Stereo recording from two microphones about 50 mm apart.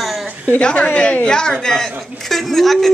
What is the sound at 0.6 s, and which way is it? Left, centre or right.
A woman's voice, centre.